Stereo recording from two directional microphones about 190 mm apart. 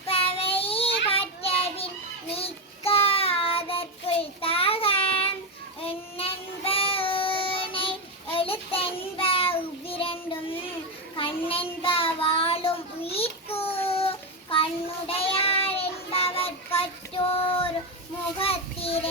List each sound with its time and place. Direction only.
0.1 s child singing: 30° left (ahead or behind)
11.2 s child singing: 30° left (ahead or behind)